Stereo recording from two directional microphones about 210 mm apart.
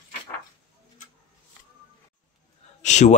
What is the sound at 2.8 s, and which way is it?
Speech, 35° left (ahead or behind).